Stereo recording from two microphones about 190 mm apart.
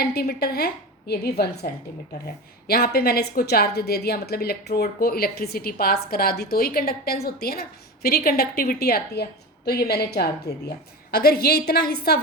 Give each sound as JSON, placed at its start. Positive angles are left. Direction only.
{"t": 0.0, "sound": "a woman's voice", "side_deg": 55}